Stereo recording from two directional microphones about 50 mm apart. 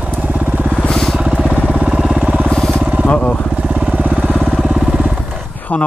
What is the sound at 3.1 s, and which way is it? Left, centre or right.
Speech, left.